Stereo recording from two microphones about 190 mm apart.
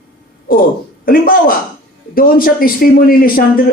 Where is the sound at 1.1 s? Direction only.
50° left (ahead or behind).